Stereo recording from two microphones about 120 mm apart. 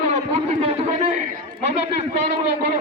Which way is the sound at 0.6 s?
70° right (ahead or behind).